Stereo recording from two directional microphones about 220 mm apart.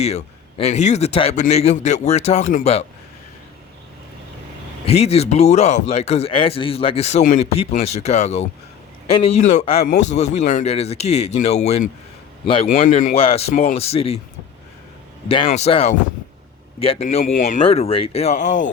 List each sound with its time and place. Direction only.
0.0 s a man's voice: 30° left (ahead or behind)
4.9 s a man's voice: 30° left (ahead or behind)
13.1 s a man's voice: 25° left (ahead or behind)
15.4 s a man's voice: 30° left (ahead or behind)